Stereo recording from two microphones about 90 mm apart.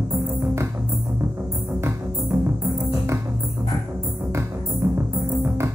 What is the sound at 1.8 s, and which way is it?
Music, 30° right (ahead or behind).